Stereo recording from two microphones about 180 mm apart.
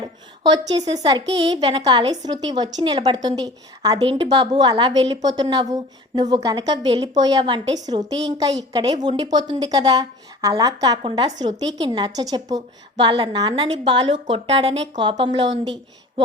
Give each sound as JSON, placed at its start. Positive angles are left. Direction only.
{"t": 0.4, "sound": "a woman's voice", "side_deg": -20}